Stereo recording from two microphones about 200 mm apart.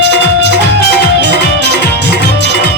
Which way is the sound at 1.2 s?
60° left (ahead or behind).